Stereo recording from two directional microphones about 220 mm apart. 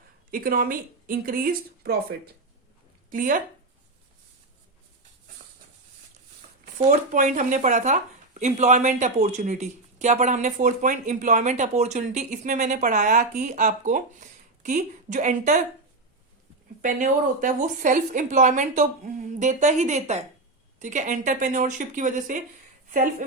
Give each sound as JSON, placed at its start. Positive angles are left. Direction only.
{"t": 0.3, "sound": "speech", "side_deg": -40}
{"t": 6.7, "sound": "speech", "side_deg": -35}
{"t": 16.8, "sound": "speech", "side_deg": -35}